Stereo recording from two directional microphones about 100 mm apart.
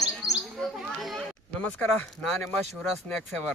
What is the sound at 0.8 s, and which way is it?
Children playing, centre (ahead or behind).